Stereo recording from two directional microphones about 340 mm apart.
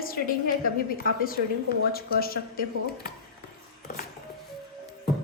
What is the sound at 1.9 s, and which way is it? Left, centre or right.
A woman's voice, left.